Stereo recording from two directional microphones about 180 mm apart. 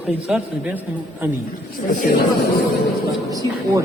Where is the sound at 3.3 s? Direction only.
20° right (ahead or behind).